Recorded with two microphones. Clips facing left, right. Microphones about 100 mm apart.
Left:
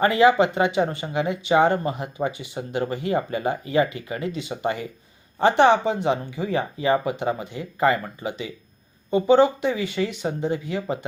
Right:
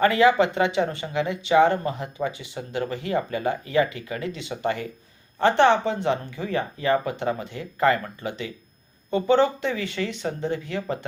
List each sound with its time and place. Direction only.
0.0 s speech: 25° left (ahead or behind)
0.3 s speech: 10° left (ahead or behind)